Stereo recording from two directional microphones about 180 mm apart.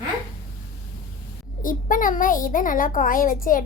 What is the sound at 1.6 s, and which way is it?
A child's voice, 50° left (ahead or behind).